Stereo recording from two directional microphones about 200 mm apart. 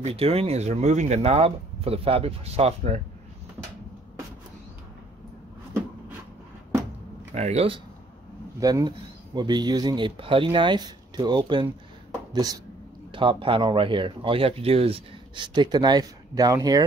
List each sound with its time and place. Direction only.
0.0 s speech: 30° right (ahead or behind)
7.3 s speech: 35° right (ahead or behind)
8.5 s speech: 20° right (ahead or behind)